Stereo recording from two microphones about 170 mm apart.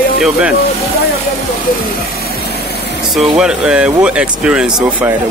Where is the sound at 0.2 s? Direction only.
5° right (ahead or behind).